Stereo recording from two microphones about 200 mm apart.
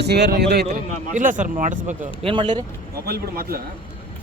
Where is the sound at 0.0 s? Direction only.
55° right (ahead or behind).